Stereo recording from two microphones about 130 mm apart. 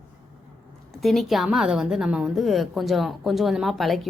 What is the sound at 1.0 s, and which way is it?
A woman's voice, centre (ahead or behind).